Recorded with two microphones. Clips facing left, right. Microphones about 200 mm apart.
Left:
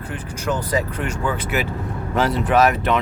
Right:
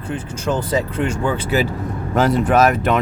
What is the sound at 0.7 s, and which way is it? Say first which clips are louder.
Speech: right 3 dB; 25° right (ahead or behind).